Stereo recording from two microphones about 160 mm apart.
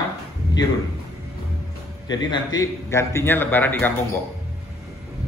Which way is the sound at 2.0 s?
25° left (ahead or behind).